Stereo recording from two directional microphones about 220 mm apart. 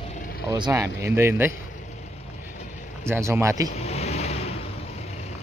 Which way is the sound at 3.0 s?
10° right (ahead or behind).